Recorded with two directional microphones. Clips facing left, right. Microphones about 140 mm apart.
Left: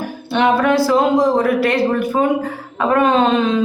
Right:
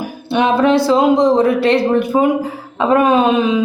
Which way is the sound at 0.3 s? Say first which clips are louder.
Right 2 dB; 20° right (ahead or behind).